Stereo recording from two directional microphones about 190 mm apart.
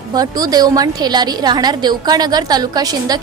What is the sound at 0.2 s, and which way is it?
A woman's voice, 20° right (ahead or behind).